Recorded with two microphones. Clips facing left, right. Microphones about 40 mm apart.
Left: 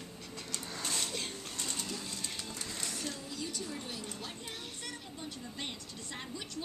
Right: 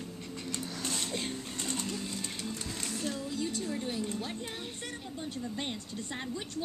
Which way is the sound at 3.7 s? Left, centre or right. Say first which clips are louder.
Right 7 dB; right.